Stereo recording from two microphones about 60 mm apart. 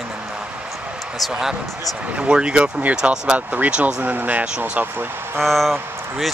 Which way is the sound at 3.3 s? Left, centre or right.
Right.